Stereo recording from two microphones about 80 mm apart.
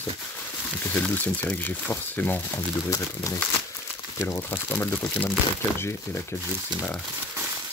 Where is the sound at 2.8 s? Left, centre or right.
Left.